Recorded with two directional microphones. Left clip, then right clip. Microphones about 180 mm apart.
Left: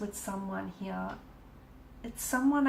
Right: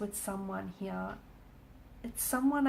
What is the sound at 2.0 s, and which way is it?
Speech, 40° right (ahead or behind).